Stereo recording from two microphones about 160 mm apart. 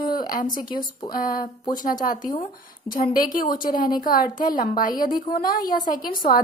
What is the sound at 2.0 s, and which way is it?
A woman's voice, 60° left (ahead or behind).